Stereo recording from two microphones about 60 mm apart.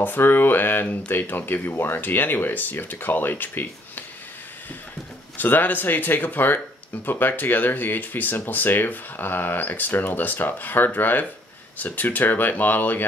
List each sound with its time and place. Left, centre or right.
0.0 s speech: left
5.4 s speech: left